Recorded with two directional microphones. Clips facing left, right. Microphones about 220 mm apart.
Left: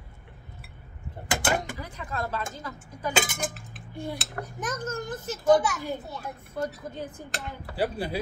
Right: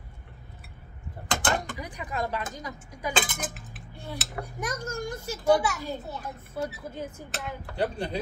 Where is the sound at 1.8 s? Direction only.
15° right (ahead or behind).